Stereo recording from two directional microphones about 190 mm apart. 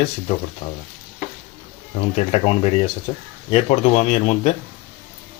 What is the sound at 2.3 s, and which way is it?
Speech, 35° left (ahead or behind).